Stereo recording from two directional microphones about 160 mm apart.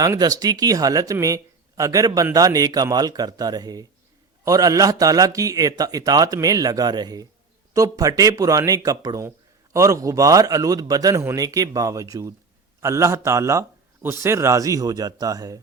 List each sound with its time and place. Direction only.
0.0 s speech: 25° right (ahead or behind)